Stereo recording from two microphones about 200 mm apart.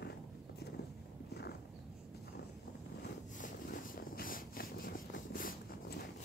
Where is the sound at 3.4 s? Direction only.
45° left (ahead or behind).